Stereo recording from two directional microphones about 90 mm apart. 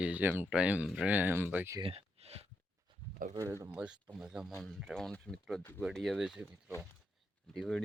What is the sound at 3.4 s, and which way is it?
Speech, 35° right (ahead or behind).